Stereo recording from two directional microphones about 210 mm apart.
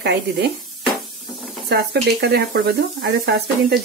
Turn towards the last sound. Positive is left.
turn(degrees=-50)  # may be behind; listen again after turning